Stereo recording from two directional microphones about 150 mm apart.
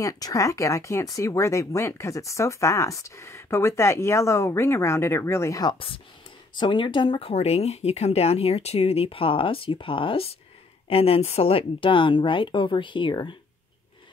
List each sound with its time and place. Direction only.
0.0 s speech: 20° left (ahead or behind)